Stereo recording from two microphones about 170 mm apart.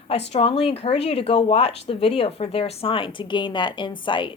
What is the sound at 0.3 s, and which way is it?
Speech, 35° left (ahead or behind).